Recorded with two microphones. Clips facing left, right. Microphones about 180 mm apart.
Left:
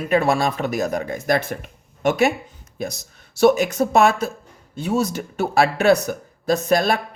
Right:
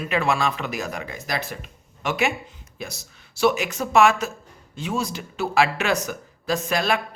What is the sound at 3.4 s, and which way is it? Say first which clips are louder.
Speech: left 6 dB; 40° left (ahead or behind).